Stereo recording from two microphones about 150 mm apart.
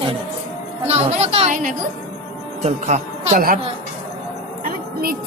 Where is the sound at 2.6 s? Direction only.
50° right (ahead or behind).